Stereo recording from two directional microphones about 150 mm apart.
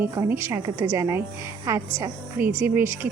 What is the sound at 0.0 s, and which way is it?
A woman's voice, 20° right (ahead or behind).